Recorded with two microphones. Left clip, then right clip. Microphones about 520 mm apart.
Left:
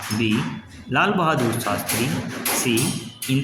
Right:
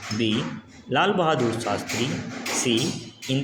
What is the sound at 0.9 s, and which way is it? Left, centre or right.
Speech, left.